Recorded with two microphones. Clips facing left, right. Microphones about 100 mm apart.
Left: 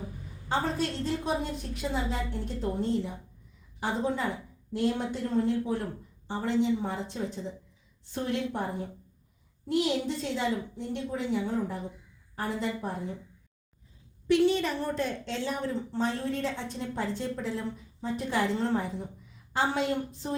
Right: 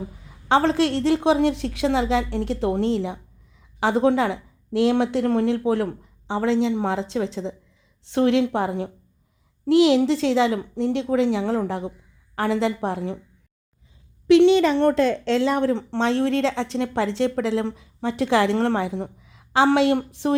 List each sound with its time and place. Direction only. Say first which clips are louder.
0.2 s speech: right 11 dB; 90° right
12.4 s speech: right 10 dB; 90° right
14.3 s speech: right 10 dB; 90° right